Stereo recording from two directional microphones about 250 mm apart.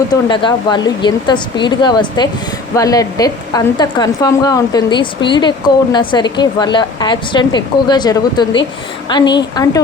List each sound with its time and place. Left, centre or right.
0.1 s a woman's voice: centre